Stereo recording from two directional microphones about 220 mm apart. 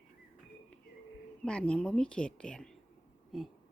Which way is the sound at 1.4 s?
5° left (ahead or behind).